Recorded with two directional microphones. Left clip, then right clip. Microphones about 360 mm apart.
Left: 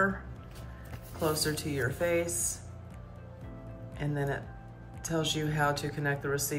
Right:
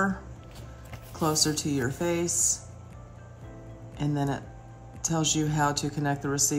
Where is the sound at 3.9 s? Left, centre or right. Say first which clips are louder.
Right 4 dB; centre.